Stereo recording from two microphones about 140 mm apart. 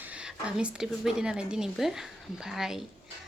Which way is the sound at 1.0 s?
5° right (ahead or behind).